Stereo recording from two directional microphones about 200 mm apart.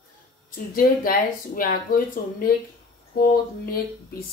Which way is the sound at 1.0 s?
45° left (ahead or behind).